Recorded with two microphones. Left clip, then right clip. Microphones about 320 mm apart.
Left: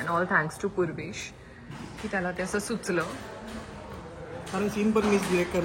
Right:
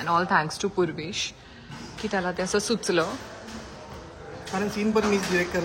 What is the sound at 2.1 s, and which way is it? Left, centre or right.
Speech, centre.